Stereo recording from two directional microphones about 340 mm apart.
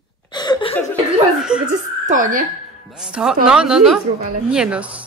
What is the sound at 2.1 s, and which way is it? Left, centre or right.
Speech, right.